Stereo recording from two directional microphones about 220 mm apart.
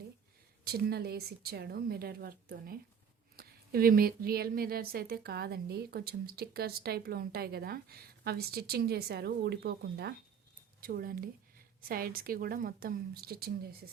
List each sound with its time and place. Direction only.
0.6 s a woman's voice: 45° right (ahead or behind)